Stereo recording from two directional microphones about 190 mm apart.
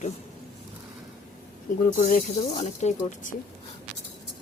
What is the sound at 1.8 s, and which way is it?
A woman's voice, 45° left (ahead or behind).